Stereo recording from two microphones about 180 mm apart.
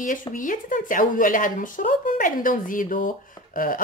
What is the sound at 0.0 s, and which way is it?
Speech, 45° left (ahead or behind).